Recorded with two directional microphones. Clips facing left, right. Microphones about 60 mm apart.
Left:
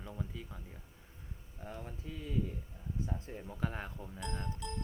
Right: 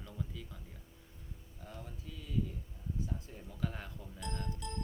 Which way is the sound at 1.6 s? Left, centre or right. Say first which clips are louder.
Left 4 dB; left.